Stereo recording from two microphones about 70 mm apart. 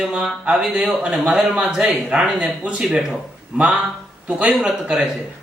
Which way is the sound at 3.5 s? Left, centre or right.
Centre.